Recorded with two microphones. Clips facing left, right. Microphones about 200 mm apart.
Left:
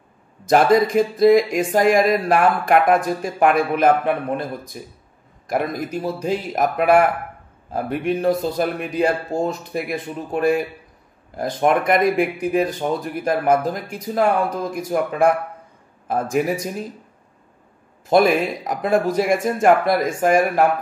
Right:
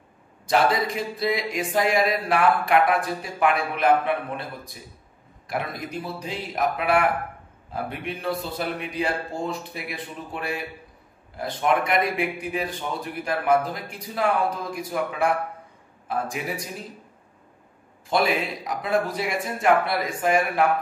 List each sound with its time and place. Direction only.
0.5 s speech: 45° left (ahead or behind)
18.0 s speech: 50° left (ahead or behind)